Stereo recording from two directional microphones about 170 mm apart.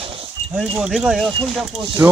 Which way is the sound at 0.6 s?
5° right (ahead or behind).